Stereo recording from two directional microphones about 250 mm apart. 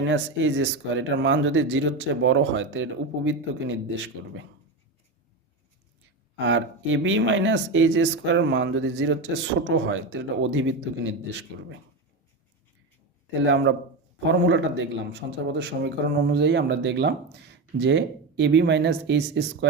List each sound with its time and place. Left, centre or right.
0.0 s speech: right
6.3 s speech: right
13.4 s speech: right